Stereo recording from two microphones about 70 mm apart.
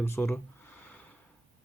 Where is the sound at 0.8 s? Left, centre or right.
Left.